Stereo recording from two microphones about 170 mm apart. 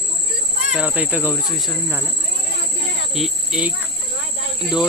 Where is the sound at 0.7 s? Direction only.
5° right (ahead or behind).